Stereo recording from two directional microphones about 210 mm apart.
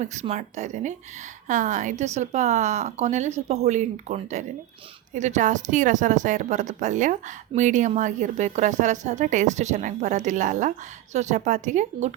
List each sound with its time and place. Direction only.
0.0 s a woman's voice: 35° right (ahead or behind)